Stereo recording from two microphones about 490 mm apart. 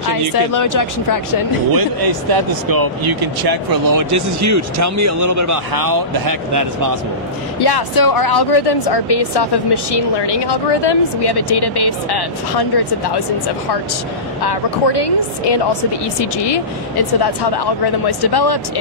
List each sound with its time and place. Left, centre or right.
0.1 s speech: left
1.8 s speech: right
7.6 s speech: left
14.4 s speech: left